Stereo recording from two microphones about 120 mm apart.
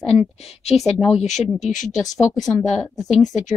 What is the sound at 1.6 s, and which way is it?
Speech, 90° left.